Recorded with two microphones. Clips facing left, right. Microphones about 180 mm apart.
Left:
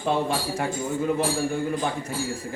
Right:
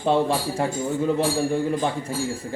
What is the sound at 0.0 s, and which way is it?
A man's voice, 30° right (ahead or behind).